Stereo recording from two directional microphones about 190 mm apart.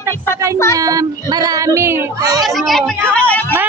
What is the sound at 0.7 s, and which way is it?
Child singing, 20° right (ahead or behind).